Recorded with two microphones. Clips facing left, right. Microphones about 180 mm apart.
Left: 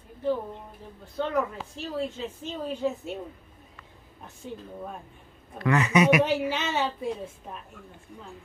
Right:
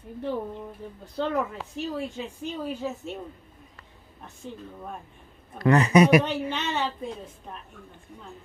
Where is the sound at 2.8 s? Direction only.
Centre (ahead or behind).